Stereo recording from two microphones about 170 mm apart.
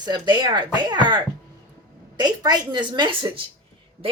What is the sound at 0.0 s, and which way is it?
A woman's voice, 25° right (ahead or behind).